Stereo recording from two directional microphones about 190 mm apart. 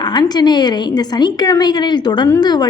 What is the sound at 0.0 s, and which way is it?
A woman's voice, 20° left (ahead or behind).